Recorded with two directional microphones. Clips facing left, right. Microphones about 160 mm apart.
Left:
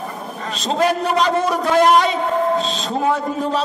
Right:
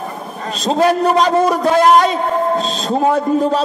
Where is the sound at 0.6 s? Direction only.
40° right (ahead or behind).